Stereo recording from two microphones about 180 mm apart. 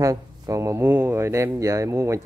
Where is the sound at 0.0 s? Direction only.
20° right (ahead or behind).